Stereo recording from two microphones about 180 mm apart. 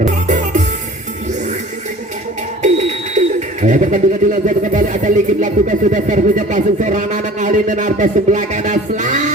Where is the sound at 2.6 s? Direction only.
40° right (ahead or behind).